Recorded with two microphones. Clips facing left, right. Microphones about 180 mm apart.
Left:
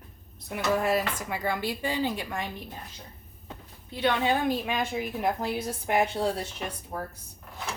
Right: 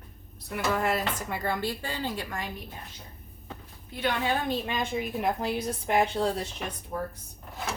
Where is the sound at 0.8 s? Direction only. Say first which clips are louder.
Left 2 dB; 10° left (ahead or behind).